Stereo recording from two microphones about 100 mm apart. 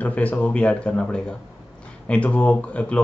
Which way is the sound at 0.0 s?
15° left (ahead or behind).